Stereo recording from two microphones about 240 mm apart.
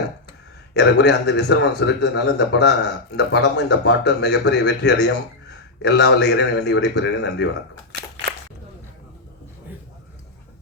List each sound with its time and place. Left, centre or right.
0.7 s speech: left